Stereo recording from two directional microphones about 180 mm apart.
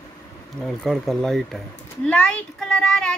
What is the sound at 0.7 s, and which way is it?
Speech, centre (ahead or behind).